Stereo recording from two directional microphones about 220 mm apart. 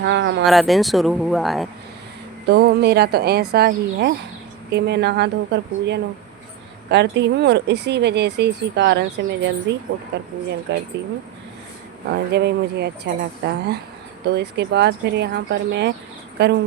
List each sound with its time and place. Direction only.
0.0 s speech: 55° right (ahead or behind)
0.4 s speech: centre (ahead or behind)
2.5 s speech: 45° right (ahead or behind)
12.1 s speech: 50° right (ahead or behind)